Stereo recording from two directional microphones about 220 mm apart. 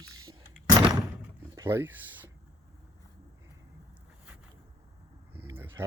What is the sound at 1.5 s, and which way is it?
Speech, 15° right (ahead or behind).